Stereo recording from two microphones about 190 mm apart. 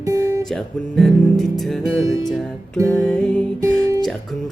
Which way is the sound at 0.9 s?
Centre (ahead or behind).